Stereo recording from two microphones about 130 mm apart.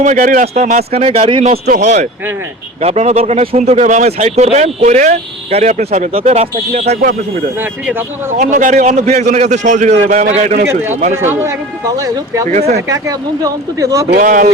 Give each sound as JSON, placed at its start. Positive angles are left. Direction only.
{"t": 0.0, "sound": "speech", "side_deg": -80}
{"t": 0.4, "sound": "a man's voice", "side_deg": -65}
{"t": 1.5, "sound": "a man's voice", "side_deg": -65}
{"t": 7.6, "sound": "speech", "side_deg": -15}
{"t": 8.4, "sound": "a man's voice", "side_deg": -80}
{"t": 11.2, "sound": "speech", "side_deg": -15}
{"t": 11.9, "sound": "speech", "side_deg": -25}
{"t": 12.5, "sound": "a man's voice", "side_deg": -60}
{"t": 12.9, "sound": "speech", "side_deg": -25}
{"t": 14.2, "sound": "speech", "side_deg": -90}